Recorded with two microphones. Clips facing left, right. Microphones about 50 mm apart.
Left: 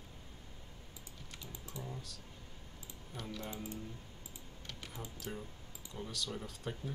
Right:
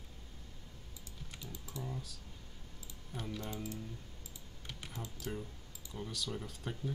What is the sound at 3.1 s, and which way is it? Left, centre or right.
Speech, centre.